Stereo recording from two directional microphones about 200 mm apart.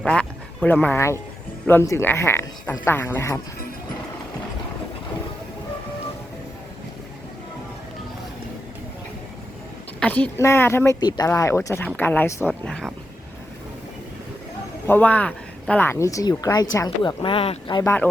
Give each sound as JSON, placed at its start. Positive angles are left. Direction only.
{"t": 0.0, "sound": "speech", "side_deg": 5}
{"t": 10.0, "sound": "speech", "side_deg": 5}
{"t": 14.8, "sound": "speech", "side_deg": 10}